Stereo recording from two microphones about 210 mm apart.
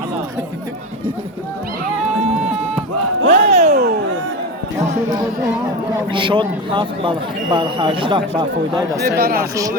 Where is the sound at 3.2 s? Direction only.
30° right (ahead or behind).